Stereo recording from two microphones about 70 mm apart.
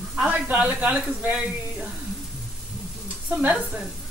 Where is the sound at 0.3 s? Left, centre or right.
Centre.